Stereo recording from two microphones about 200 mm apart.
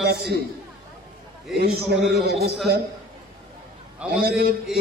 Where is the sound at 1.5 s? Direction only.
55° right (ahead or behind).